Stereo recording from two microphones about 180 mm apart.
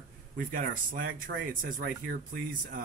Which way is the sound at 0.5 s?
50° right (ahead or behind).